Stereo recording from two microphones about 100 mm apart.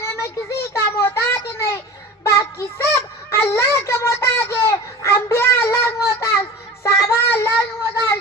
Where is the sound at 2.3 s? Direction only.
25° left (ahead or behind).